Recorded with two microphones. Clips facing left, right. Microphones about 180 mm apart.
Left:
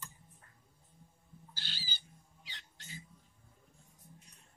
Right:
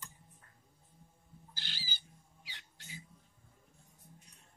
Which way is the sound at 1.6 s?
15° right (ahead or behind).